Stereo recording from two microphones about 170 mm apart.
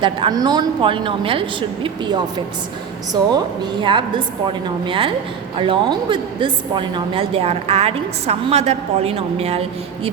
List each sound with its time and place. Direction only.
0.0 s a woman's voice: 25° right (ahead or behind)